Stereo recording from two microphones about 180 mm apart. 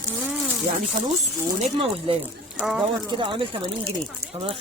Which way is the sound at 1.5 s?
35° right (ahead or behind).